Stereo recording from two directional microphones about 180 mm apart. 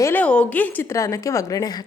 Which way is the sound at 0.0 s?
10° left (ahead or behind).